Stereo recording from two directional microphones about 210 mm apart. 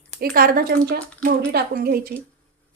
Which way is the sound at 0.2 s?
45° right (ahead or behind).